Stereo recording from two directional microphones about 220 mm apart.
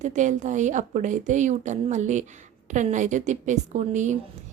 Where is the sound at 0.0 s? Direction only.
35° right (ahead or behind).